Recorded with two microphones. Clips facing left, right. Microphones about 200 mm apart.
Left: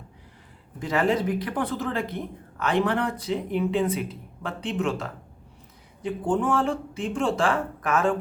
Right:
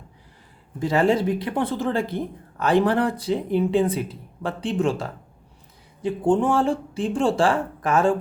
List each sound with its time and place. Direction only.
0.8 s speech: 30° right (ahead or behind)